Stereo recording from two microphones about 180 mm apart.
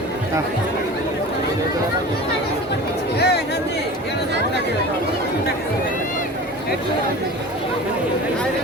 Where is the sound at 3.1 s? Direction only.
65° left (ahead or behind).